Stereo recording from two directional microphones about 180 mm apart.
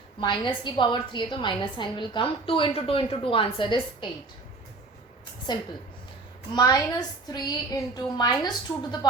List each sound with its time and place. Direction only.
0.2 s a woman's voice: 25° left (ahead or behind)
5.5 s a woman's voice: 25° left (ahead or behind)